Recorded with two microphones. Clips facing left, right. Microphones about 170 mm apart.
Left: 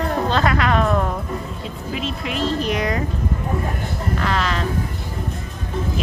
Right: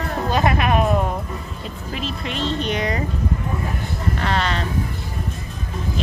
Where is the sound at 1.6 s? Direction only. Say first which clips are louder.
Even; centre (ahead or behind).